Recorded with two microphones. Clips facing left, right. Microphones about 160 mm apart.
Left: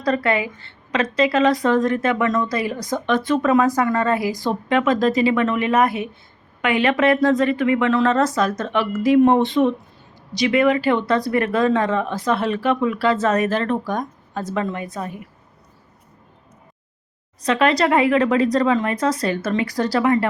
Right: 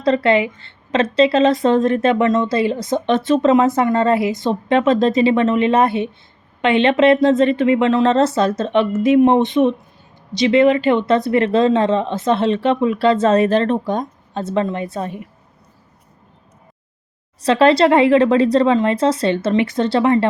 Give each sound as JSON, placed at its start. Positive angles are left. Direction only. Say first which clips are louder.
{"t": 0.0, "sound": "a woman's voice", "louder": "right 5 dB", "side_deg": -25}
{"t": 17.4, "sound": "a woman's voice", "louder": "right 5 dB", "side_deg": -30}